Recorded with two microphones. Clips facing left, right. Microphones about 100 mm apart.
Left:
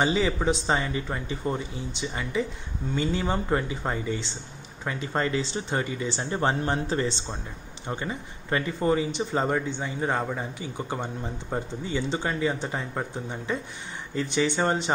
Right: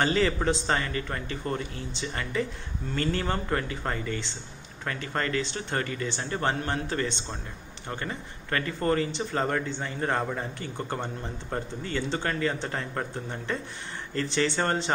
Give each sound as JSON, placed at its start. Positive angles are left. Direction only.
{"t": 0.0, "sound": "speech", "side_deg": 10}
{"t": 6.1, "sound": "speech", "side_deg": 25}